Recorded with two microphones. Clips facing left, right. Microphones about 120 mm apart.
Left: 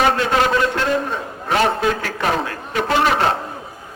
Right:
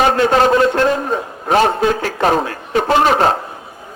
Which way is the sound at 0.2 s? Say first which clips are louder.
Right 5 dB; 35° right (ahead or behind).